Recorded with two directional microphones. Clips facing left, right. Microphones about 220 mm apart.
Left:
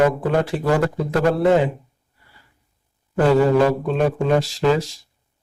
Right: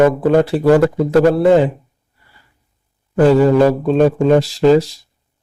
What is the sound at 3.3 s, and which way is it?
Speech, 35° right (ahead or behind).